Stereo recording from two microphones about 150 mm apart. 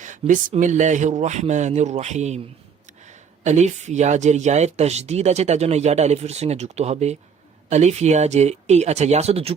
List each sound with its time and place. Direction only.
0.0 s speech: 55° right (ahead or behind)